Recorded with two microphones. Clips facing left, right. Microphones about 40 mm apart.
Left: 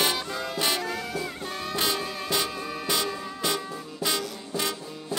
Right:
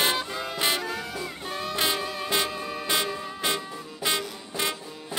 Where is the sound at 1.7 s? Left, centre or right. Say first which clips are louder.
Right 1 dB; right.